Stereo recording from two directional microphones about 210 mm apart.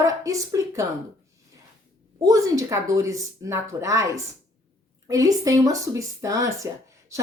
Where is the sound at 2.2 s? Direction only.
15° right (ahead or behind).